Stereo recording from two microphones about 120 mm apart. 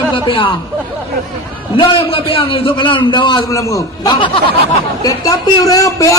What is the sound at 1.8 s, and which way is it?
A man's voice, 50° left (ahead or behind).